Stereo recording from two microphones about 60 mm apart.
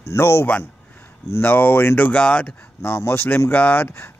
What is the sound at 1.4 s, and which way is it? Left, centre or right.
Speech, left.